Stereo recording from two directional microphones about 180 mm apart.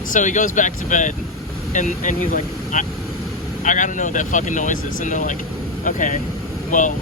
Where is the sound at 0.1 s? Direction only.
45° left (ahead or behind).